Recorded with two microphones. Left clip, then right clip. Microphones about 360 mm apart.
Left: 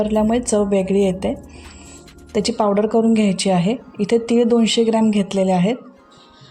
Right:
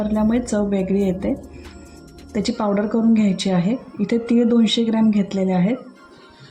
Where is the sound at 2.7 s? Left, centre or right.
Left.